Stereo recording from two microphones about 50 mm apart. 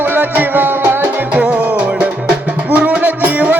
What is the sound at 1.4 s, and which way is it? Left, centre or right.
Music, right.